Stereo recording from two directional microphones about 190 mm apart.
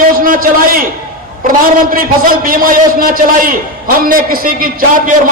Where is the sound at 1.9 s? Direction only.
50° right (ahead or behind).